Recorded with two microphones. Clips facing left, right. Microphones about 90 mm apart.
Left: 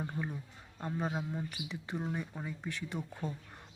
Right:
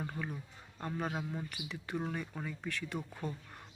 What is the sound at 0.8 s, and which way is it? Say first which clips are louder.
Speech: left 1 dB; 20° left (ahead or behind).